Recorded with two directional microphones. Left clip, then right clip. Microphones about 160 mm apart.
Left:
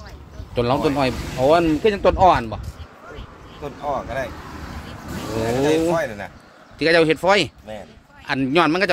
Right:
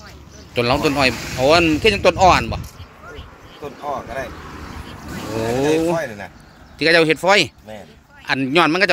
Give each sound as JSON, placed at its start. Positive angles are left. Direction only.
{"t": 0.6, "sound": "speech", "side_deg": -5}
{"t": 3.6, "sound": "speech", "side_deg": -25}
{"t": 4.4, "sound": "vehicle", "side_deg": 60}
{"t": 5.6, "sound": "speech", "side_deg": -5}